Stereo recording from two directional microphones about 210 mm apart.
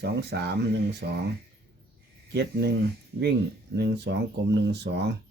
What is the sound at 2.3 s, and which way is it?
Speech, 50° right (ahead or behind).